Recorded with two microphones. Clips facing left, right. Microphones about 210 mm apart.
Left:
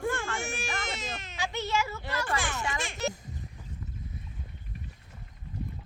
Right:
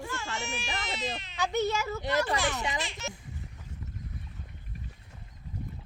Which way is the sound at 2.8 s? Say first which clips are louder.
Left 4 dB; 45° left (ahead or behind).